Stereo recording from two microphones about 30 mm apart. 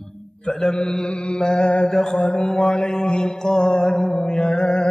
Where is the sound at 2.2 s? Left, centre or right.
Left.